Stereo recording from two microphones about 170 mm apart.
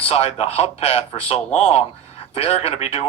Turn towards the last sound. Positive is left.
turn(degrees=35)  # may be behind; listen again after turning